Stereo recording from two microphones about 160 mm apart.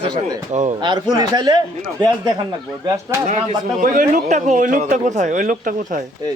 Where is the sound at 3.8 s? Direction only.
55° right (ahead or behind).